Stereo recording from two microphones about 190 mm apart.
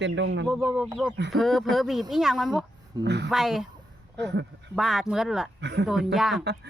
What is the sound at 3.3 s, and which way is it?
Speech, centre (ahead or behind).